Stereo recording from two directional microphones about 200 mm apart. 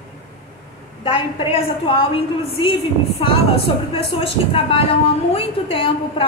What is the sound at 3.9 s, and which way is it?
A woman's voice, 30° left (ahead or behind).